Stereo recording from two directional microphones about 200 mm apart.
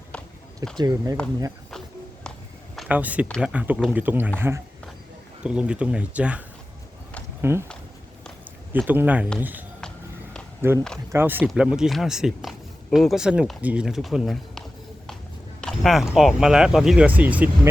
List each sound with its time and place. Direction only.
0.8 s speech: 20° right (ahead or behind)
2.7 s speech: 5° right (ahead or behind)
3.2 s speech: 5° left (ahead or behind)
3.5 s a man's voice: 5° right (ahead or behind)
7.4 s a man's voice: 15° right (ahead or behind)
8.7 s a man's voice: 10° right (ahead or behind)
15.6 s speech: centre (ahead or behind)